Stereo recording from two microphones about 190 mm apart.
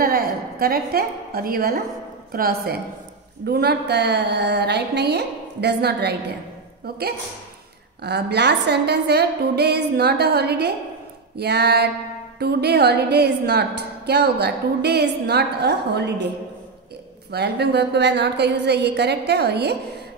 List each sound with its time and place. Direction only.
0.0 s a woman's voice: 50° right (ahead or behind)
8.0 s a woman's voice: 60° right (ahead or behind)
17.3 s a woman's voice: 60° right (ahead or behind)